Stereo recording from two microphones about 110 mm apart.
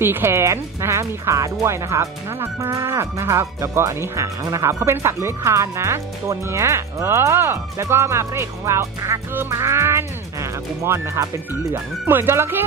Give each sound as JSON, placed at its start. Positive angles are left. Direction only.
{"t": 0.0, "sound": "speech", "side_deg": -20}